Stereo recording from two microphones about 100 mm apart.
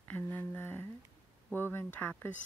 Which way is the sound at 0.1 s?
20° left (ahead or behind).